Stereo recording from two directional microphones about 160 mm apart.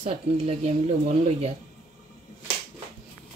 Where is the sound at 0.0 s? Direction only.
40° right (ahead or behind).